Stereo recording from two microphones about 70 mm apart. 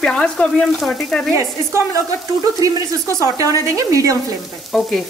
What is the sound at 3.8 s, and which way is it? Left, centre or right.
Speech, right.